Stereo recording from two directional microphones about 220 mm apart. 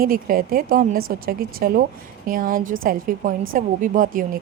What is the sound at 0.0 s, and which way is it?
Speech, 40° right (ahead or behind).